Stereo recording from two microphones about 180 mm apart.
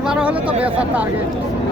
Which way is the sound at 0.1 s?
5° right (ahead or behind).